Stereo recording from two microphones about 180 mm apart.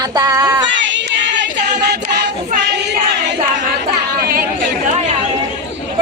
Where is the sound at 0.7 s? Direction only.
85° right.